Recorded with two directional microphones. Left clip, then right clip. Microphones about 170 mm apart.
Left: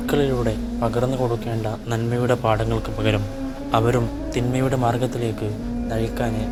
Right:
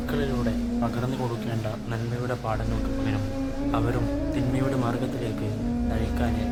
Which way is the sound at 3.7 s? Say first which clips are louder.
Left 8 dB; 45° left (ahead or behind).